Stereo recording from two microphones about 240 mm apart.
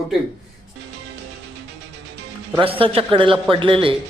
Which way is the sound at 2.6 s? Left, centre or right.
Right.